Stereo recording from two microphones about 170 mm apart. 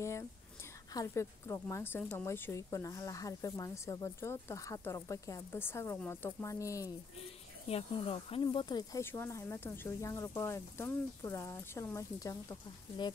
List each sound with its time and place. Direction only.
0.9 s a woman's voice: 15° left (ahead or behind)
7.6 s a woman's voice: 35° left (ahead or behind)